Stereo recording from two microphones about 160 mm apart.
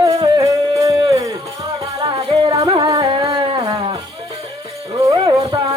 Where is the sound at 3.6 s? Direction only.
25° right (ahead or behind).